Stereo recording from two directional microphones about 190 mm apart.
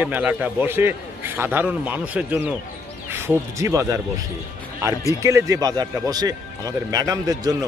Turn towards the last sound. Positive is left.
turn(degrees=-20)  # may be behind; listen again after turning